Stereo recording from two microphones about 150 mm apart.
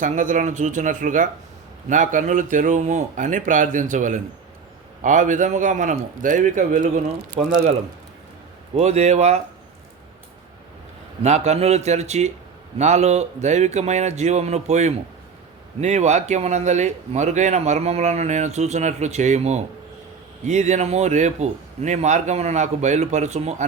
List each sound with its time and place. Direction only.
0.0 s speech: 60° right (ahead or behind)
8.7 s speech: 50° right (ahead or behind)
11.2 s speech: 45° right (ahead or behind)